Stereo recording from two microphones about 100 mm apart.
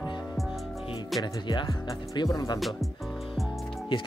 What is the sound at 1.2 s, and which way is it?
Speech, 50° left (ahead or behind).